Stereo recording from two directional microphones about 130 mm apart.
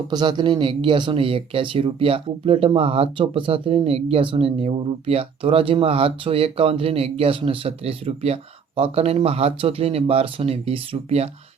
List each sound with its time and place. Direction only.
0.1 s speech: 35° right (ahead or behind); by 11.3 s 50° right (ahead or behind)